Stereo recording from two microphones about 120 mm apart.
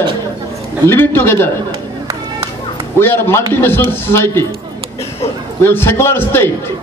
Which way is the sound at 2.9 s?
20° left (ahead or behind).